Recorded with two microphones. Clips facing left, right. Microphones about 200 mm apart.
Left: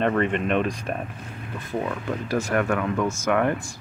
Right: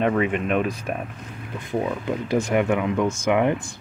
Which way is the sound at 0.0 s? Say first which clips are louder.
Right 1 dB; 5° right (ahead or behind).